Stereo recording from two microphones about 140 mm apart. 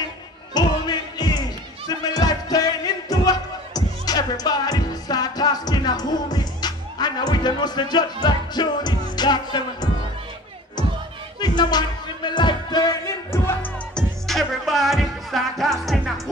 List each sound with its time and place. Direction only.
0.6 s music: 30° left (ahead or behind)
11.4 s music: 30° left (ahead or behind)
13.9 s music: centre (ahead or behind)